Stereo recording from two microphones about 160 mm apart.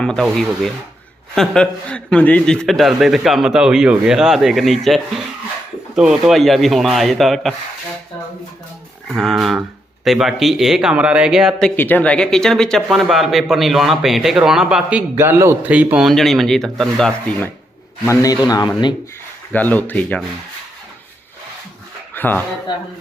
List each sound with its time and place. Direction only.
0.0 s a man's voice: 5° left (ahead or behind)
9.1 s a man's voice: centre (ahead or behind)
11.8 s a man's voice: 10° left (ahead or behind)
18.0 s a man's voice: 20° left (ahead or behind)
19.5 s speech: 10° left (ahead or behind)
22.1 s speech: 10° left (ahead or behind)